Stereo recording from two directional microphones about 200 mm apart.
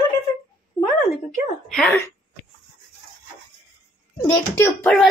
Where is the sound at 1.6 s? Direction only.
5° left (ahead or behind).